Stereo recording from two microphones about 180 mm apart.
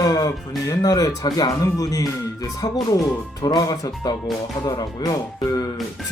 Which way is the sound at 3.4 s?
20° left (ahead or behind).